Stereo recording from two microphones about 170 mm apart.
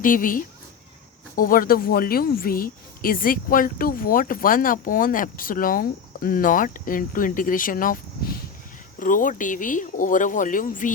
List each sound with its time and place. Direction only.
0.0 s speech: 55° left (ahead or behind)